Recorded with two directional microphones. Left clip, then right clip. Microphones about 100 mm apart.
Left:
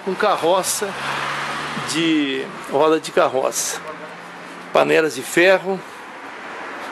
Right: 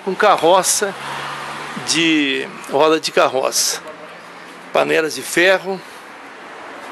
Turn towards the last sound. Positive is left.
turn(degrees=-5)  # may be behind; listen again after turning